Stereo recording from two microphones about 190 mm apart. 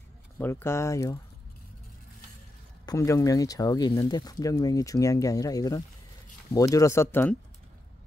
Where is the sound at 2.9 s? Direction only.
15° left (ahead or behind).